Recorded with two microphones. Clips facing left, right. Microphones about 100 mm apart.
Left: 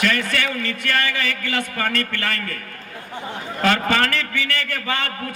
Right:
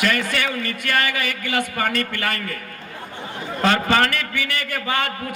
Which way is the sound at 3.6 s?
25° right (ahead or behind).